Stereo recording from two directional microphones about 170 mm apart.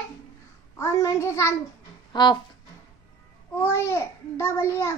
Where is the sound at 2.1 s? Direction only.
25° left (ahead or behind).